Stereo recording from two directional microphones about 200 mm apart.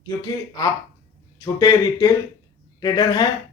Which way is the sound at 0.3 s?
20° left (ahead or behind).